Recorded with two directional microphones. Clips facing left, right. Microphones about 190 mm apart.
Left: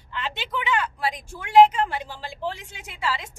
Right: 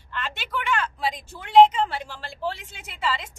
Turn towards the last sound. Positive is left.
turn(degrees=10)  # may be behind; listen again after turning